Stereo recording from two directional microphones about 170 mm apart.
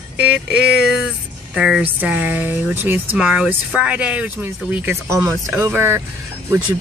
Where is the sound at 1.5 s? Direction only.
5° right (ahead or behind).